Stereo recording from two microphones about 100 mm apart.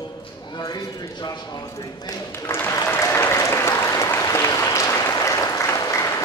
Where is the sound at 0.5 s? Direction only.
45° left (ahead or behind).